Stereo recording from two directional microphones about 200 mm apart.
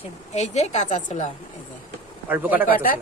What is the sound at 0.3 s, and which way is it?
Speech, 35° left (ahead or behind).